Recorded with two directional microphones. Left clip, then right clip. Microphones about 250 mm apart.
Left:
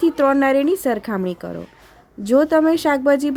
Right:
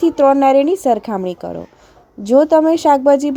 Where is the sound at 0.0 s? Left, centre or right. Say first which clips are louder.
Right 5 dB; centre.